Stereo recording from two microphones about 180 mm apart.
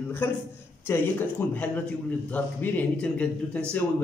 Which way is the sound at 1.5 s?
10° left (ahead or behind).